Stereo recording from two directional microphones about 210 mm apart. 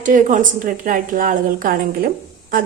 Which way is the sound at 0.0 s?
40° right (ahead or behind).